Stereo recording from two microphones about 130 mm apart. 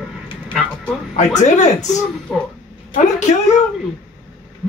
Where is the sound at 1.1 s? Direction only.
65° left (ahead or behind).